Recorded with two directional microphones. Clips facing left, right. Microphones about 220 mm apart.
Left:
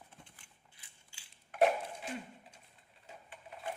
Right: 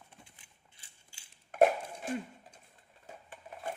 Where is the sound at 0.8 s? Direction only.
40° right (ahead or behind).